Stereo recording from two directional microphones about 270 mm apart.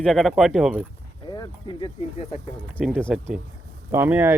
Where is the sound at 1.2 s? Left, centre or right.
Centre.